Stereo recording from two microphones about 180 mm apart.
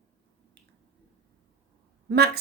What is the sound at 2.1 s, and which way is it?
Speech, 65° right (ahead or behind).